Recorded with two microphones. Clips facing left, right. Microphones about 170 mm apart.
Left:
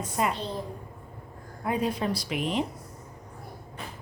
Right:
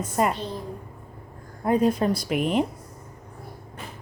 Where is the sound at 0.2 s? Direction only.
45° right (ahead or behind).